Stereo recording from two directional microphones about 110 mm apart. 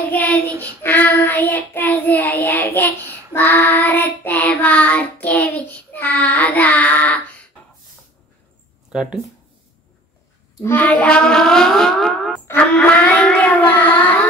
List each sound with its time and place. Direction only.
0.1 s child singing: 10° left (ahead or behind)
8.9 s speech: 5° right (ahead or behind)
10.6 s a sound: 15° left (ahead or behind)